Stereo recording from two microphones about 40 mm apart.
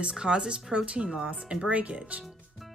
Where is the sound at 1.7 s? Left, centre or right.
Right.